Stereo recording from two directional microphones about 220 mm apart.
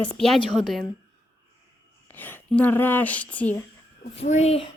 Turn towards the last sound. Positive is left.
turn(degrees=30)  # may be behind; listen again after turning